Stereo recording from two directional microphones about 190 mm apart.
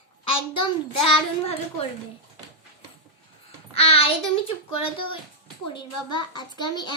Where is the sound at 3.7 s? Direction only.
30° left (ahead or behind).